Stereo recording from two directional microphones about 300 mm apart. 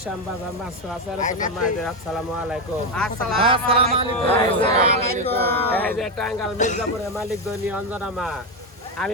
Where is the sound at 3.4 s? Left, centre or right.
Centre.